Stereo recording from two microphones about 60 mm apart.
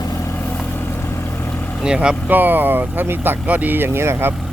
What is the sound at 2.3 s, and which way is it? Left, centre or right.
Speech, right.